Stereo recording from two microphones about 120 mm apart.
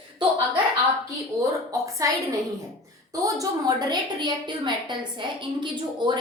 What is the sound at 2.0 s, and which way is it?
Speech, 25° right (ahead or behind).